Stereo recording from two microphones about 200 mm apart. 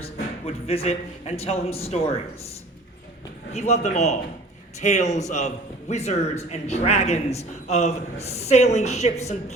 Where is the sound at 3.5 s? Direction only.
35° left (ahead or behind).